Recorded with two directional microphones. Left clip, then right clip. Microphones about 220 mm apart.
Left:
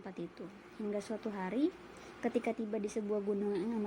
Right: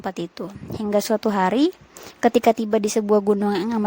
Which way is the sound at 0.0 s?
50° right (ahead or behind).